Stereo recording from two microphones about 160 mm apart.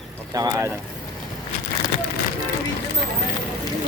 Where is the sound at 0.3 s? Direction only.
20° right (ahead or behind).